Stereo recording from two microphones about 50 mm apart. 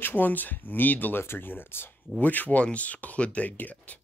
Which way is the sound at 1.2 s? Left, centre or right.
Left.